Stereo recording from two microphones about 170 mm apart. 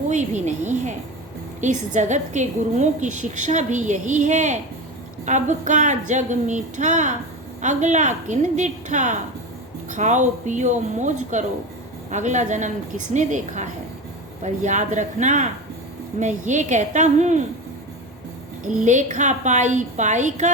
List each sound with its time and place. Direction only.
0.1 s a woman's voice: 45° right (ahead or behind)
18.8 s a woman's voice: 45° right (ahead or behind)